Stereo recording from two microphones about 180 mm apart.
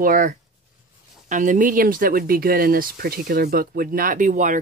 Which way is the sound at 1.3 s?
45° right (ahead or behind).